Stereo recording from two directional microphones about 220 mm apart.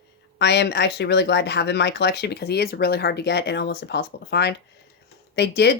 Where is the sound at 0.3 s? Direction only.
50° left (ahead or behind).